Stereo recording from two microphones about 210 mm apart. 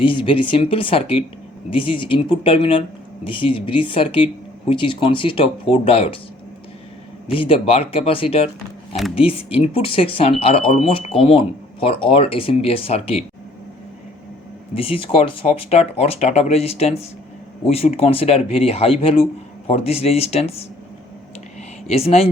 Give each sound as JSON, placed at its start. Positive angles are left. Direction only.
{"t": 0.0, "sound": "speech", "side_deg": 25}
{"t": 7.3, "sound": "speech", "side_deg": 25}
{"t": 14.8, "sound": "speech", "side_deg": 25}
{"t": 21.8, "sound": "speech", "side_deg": 30}